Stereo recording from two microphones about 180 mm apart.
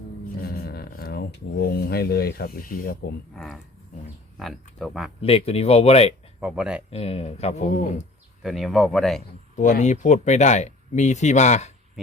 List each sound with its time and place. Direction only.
0.4 s speech: 60° left (ahead or behind)
3.3 s speech: centre (ahead or behind)
4.8 s speech: centre (ahead or behind)
5.2 s speech: 35° left (ahead or behind)
6.4 s speech: 5° right (ahead or behind)
6.9 s speech: 35° left (ahead or behind)
8.4 s speech: centre (ahead or behind)
9.6 s speech: 40° left (ahead or behind)